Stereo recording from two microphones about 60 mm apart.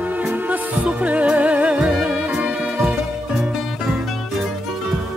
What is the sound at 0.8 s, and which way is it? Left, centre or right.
Music, right.